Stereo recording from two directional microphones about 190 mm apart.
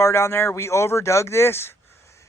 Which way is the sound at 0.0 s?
15° left (ahead or behind).